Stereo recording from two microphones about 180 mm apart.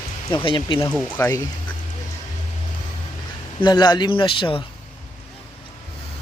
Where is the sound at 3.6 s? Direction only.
25° left (ahead or behind).